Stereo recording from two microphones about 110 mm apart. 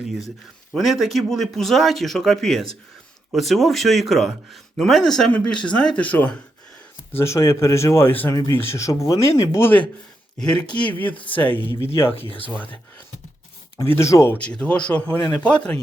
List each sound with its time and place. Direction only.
0.7 s speech: centre (ahead or behind)
7.2 s speech: 25° left (ahead or behind)
8.3 s speech: 30° left (ahead or behind)
13.8 s speech: 25° left (ahead or behind)
14.3 s speech: 10° left (ahead or behind)